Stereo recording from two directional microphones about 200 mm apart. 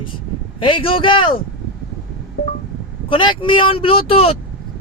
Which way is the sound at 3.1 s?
25° left (ahead or behind).